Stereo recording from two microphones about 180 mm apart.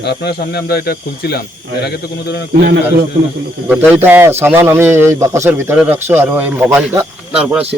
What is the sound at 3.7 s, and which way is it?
A man's voice, 10° right (ahead or behind).